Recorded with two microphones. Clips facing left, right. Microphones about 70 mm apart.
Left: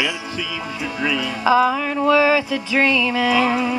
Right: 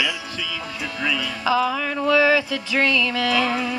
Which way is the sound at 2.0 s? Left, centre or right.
Left.